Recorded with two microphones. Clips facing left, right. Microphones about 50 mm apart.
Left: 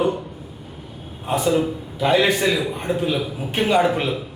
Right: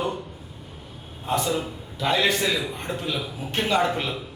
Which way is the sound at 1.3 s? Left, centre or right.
Centre.